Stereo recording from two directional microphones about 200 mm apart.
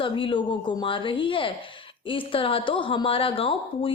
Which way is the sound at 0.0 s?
25° left (ahead or behind).